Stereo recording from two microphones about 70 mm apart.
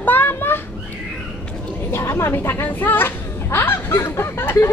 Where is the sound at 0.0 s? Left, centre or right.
Left.